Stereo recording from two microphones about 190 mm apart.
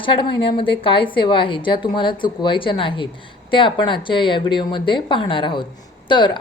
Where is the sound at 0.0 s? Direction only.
25° left (ahead or behind).